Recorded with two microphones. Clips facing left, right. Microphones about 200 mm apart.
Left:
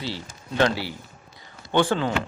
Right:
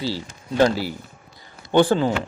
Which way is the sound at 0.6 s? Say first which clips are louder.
Right 4 dB; 45° right (ahead or behind).